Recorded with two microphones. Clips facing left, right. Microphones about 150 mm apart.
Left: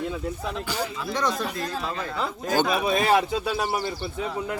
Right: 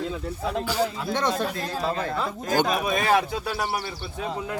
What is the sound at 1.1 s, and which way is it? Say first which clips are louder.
Speech: left 1 dB; 25° right (ahead or behind).